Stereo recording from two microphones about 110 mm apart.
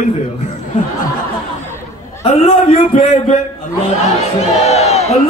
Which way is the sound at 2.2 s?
65° left (ahead or behind).